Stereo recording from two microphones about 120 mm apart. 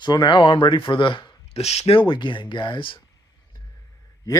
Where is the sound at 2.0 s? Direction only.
45° left (ahead or behind).